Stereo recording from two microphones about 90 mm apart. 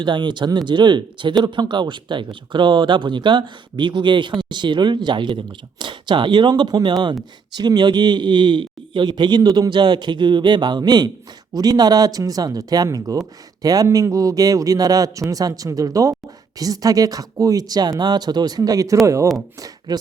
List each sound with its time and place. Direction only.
0.0 s speech: 60° right (ahead or behind)
6.5 s a man's voice: 50° right (ahead or behind)